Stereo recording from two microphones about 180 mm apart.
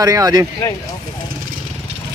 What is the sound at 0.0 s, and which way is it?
Speech, 20° right (ahead or behind).